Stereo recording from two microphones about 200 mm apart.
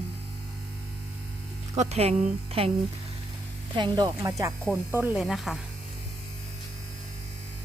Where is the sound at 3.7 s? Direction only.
20° right (ahead or behind).